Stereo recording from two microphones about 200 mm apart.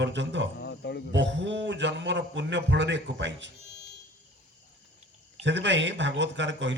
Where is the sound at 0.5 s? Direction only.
60° left (ahead or behind).